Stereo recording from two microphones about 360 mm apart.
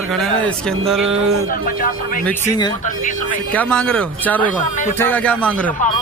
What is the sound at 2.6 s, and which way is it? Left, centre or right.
Speech, centre.